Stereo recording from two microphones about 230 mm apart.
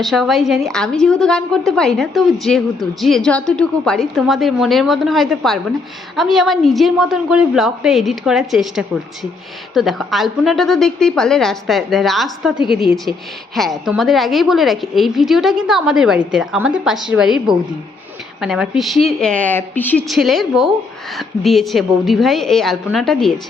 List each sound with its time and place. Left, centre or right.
0.0 s a woman's voice: centre